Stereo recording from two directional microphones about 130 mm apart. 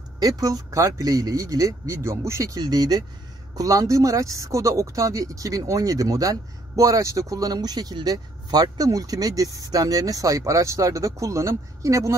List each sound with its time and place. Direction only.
0.2 s speech: 25° right (ahead or behind)